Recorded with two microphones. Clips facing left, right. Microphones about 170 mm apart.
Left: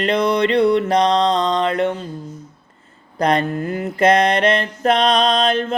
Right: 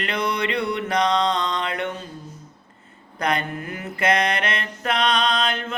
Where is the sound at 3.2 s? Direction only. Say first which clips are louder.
Left 7 dB; 35° left (ahead or behind).